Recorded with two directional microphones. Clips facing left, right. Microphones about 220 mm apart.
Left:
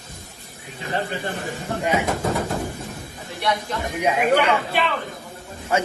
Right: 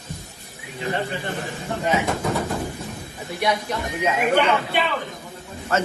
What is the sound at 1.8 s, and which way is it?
Speech, 15° left (ahead or behind).